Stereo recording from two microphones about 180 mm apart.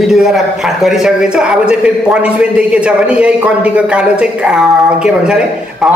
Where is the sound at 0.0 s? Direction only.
Centre (ahead or behind).